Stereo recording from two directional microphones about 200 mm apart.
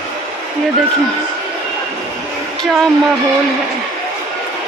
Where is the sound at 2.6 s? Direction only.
Centre (ahead or behind).